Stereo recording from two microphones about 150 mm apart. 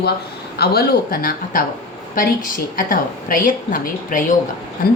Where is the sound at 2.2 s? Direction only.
65° left (ahead or behind).